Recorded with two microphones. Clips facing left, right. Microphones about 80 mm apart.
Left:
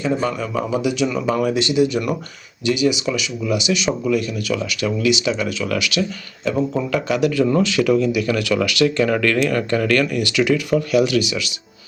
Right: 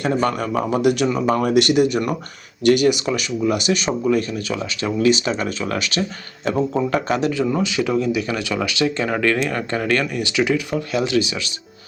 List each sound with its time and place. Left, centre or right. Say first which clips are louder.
0.0 s speech: right 1 dB; right
7.6 s speech: left 3 dB; right